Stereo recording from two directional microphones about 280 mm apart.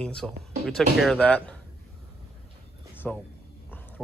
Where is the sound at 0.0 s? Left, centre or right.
Centre.